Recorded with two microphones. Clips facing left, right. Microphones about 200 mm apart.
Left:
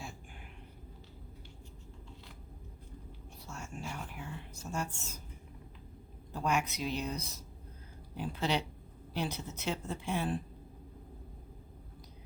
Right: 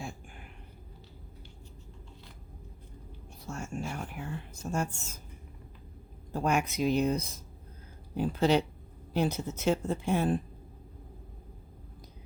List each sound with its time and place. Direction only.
3.4 s speech: 50° right (ahead or behind)
6.3 s speech: 50° right (ahead or behind)